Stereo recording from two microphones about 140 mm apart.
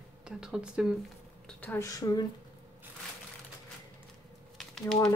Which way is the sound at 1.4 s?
10° left (ahead or behind).